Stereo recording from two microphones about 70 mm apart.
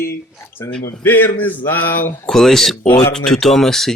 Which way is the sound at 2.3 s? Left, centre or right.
Centre.